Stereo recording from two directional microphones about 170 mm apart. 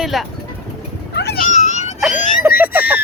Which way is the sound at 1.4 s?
45° left (ahead or behind).